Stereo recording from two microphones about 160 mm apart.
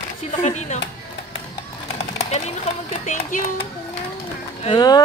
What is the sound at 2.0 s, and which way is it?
Speech, 40° left (ahead or behind).